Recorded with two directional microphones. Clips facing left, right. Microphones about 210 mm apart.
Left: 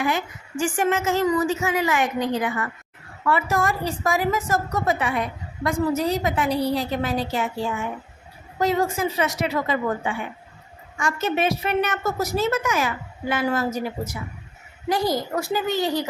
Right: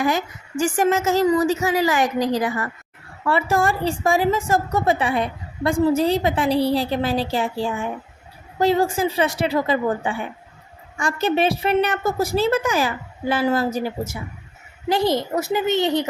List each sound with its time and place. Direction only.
0.0 s a woman's voice: 40° right (ahead or behind); by 16.0 s 20° right (ahead or behind)